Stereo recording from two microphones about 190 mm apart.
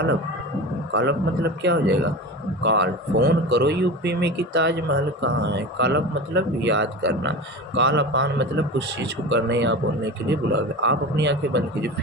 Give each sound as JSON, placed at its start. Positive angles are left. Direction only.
{"t": 0.9, "sound": "speech", "side_deg": -60}